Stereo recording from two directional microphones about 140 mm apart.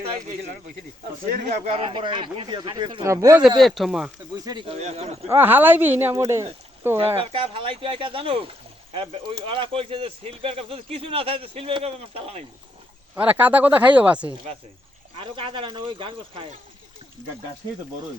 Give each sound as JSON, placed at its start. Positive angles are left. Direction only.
{"t": 1.5, "sound": "speech", "side_deg": -50}
{"t": 3.0, "sound": "speech", "side_deg": -25}
{"t": 3.6, "sound": "speech", "side_deg": 0}
{"t": 4.4, "sound": "speech", "side_deg": -25}
{"t": 4.8, "sound": "speech", "side_deg": -55}
{"t": 5.3, "sound": "speech", "side_deg": -15}
{"t": 7.2, "sound": "speech", "side_deg": -40}
{"t": 13.1, "sound": "speech", "side_deg": -10}
{"t": 15.2, "sound": "speech", "side_deg": -40}